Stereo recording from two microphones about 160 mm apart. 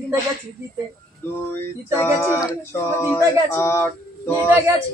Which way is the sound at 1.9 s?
15° left (ahead or behind).